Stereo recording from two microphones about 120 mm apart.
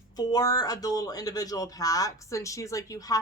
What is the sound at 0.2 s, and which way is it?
Speech, 30° left (ahead or behind).